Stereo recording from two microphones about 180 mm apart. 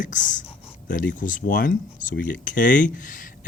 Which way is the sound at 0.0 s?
45° left (ahead or behind).